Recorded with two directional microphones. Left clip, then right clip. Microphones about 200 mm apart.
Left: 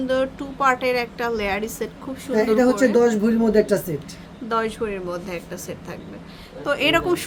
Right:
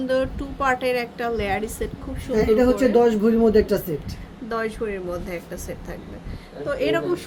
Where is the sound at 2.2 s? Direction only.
30° left (ahead or behind).